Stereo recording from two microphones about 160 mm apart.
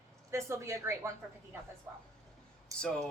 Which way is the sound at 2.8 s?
5° left (ahead or behind).